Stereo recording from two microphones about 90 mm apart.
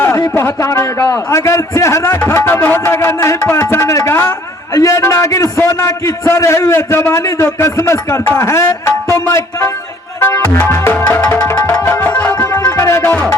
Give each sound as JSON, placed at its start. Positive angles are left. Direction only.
{"t": 0.0, "sound": "a man's voice", "side_deg": 30}
{"t": 10.2, "sound": "music", "side_deg": 25}
{"t": 13.0, "sound": "music", "side_deg": 20}